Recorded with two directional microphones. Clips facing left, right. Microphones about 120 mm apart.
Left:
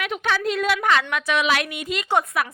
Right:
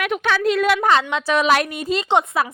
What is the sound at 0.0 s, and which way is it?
Speech, 70° right (ahead or behind).